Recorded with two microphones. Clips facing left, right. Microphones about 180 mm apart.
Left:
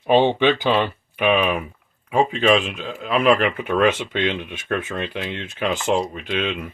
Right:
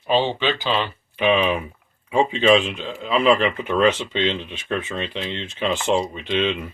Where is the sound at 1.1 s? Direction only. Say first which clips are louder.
Even; 5° left (ahead or behind).